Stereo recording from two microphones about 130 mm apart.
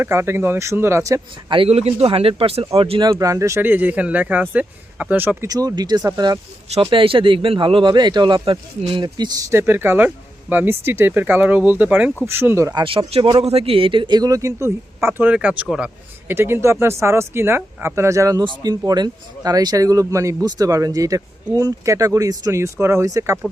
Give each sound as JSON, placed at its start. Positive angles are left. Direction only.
{"t": 0.0, "sound": "a man's voice", "side_deg": -20}
{"t": 1.5, "sound": "speech", "side_deg": -45}
{"t": 3.0, "sound": "speech", "side_deg": -30}
{"t": 5.5, "sound": "speech", "side_deg": -30}
{"t": 6.9, "sound": "a man's voice", "side_deg": -40}
{"t": 12.8, "sound": "a man's voice", "side_deg": -40}
{"t": 16.3, "sound": "a man's voice", "side_deg": -20}